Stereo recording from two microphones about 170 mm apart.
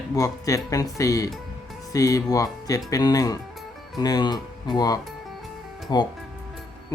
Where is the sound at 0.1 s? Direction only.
20° left (ahead or behind).